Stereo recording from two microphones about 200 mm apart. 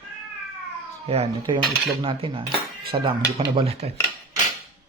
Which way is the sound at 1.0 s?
30° right (ahead or behind).